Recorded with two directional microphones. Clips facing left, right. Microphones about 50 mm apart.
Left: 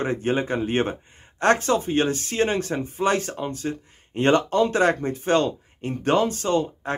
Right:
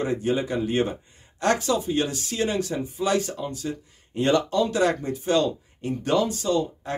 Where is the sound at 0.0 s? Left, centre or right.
Left.